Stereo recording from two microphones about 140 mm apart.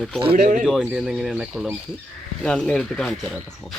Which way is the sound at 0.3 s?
90° right.